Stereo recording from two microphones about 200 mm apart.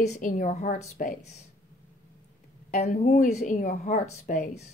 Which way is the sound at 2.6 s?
35° left (ahead or behind).